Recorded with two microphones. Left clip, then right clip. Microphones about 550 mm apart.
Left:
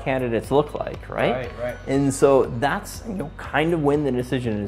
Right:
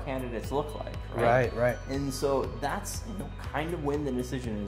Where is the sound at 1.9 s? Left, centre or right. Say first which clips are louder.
Left 12 dB; left.